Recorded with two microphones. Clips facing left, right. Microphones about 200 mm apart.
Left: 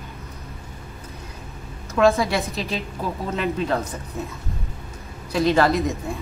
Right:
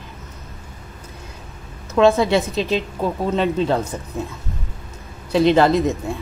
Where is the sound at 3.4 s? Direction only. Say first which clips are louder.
Right 4 dB; 25° right (ahead or behind).